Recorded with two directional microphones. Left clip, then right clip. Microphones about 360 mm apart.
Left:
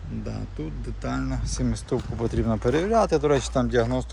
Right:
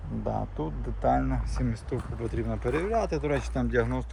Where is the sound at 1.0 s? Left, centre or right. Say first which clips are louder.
Right 5 dB; centre.